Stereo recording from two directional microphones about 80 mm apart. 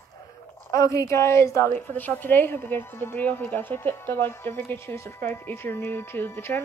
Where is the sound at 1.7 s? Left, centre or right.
Left.